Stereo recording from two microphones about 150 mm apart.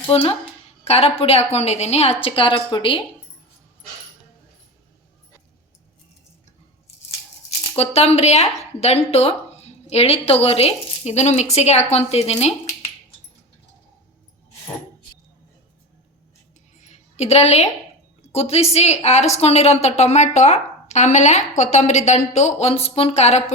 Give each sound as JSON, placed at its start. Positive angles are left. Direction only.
{"t": 0.1, "sound": "a woman's voice", "side_deg": 40}
{"t": 7.8, "sound": "speech", "side_deg": 45}
{"t": 16.7, "sound": "a sound", "side_deg": 50}
{"t": 18.3, "sound": "speech", "side_deg": 40}